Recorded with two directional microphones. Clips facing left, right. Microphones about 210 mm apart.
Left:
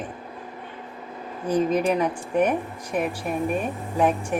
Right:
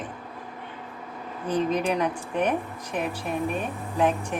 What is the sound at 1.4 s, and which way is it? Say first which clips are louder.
Speech: left 3 dB; 10° left (ahead or behind).